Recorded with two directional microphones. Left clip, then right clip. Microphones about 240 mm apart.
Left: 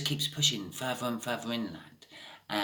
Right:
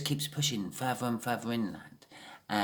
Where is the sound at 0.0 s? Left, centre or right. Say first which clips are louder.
Left 5 dB; right.